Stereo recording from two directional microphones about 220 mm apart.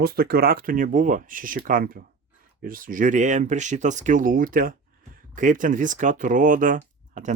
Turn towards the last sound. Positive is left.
turn(degrees=-35)  # may be behind; listen again after turning